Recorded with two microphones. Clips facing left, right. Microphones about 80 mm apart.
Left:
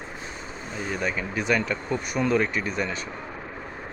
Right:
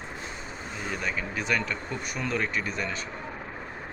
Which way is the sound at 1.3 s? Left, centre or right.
Centre.